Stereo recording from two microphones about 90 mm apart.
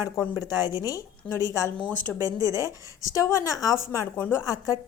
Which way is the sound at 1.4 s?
35° left (ahead or behind).